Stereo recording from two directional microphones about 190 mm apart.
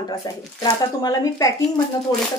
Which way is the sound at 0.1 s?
20° left (ahead or behind).